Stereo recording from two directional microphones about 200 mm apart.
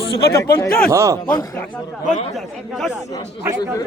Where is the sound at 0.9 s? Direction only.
15° right (ahead or behind).